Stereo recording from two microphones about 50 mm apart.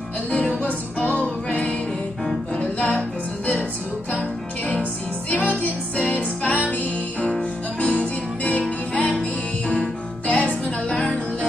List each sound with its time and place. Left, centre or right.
0.3 s music: left
5.3 s music: left
10.9 s music: centre